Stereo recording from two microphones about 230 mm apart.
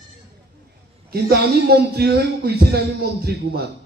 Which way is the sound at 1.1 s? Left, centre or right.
Right.